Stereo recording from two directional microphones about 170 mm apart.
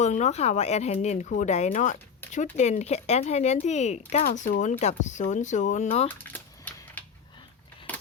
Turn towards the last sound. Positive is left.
turn(degrees=30)  # may be behind; listen again after turning